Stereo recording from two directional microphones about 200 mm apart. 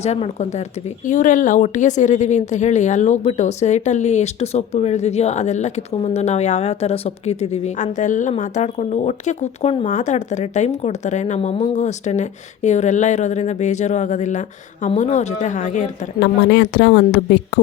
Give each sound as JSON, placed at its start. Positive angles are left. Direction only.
{"t": 0.0, "sound": "speech", "side_deg": 35}
{"t": 16.2, "sound": "speech", "side_deg": 60}